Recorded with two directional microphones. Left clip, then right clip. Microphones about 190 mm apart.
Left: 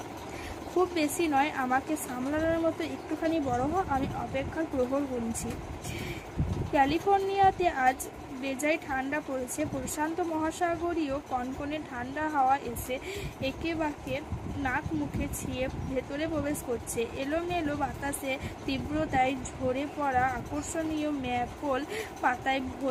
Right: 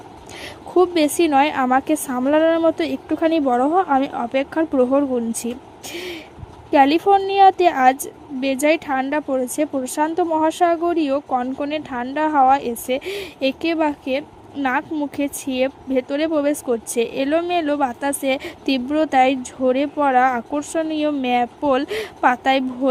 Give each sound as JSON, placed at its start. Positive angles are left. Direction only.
{"t": 0.8, "sound": "speech", "side_deg": -45}
{"t": 5.9, "sound": "a sound", "side_deg": -45}
{"t": 6.7, "sound": "speech", "side_deg": -45}